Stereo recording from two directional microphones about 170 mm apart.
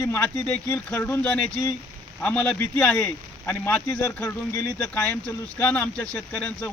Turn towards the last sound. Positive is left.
turn(degrees=5)  # may be behind; listen again after turning